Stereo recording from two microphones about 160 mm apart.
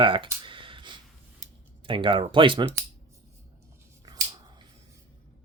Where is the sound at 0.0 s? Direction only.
30° right (ahead or behind).